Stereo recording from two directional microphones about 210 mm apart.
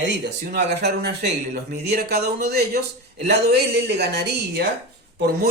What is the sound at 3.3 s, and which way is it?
Speech, 50° right (ahead or behind).